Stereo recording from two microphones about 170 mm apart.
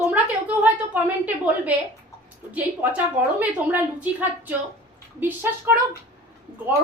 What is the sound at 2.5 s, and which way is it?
A woman's voice, 10° right (ahead or behind).